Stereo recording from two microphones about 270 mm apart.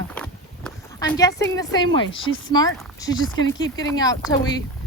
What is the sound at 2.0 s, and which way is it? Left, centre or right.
A woman's voice, centre.